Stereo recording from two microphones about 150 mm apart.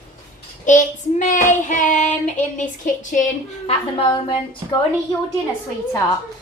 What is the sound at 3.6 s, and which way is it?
Speech, 40° left (ahead or behind).